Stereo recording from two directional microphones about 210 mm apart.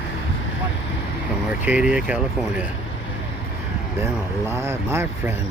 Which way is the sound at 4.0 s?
10° right (ahead or behind).